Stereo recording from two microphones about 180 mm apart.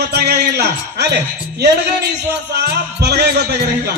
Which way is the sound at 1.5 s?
65° right (ahead or behind).